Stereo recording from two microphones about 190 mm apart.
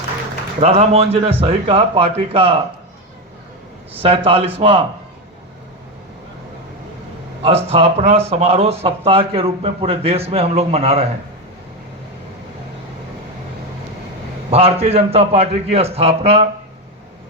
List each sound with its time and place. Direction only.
0.6 s speech: 35° right (ahead or behind)
3.9 s speech: 30° right (ahead or behind)
7.4 s speech: 30° right (ahead or behind)
14.5 s speech: 30° right (ahead or behind)